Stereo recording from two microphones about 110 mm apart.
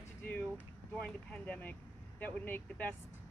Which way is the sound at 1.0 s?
10° left (ahead or behind).